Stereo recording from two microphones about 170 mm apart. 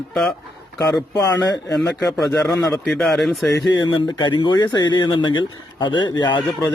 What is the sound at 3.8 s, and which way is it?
Speech, 25° left (ahead or behind).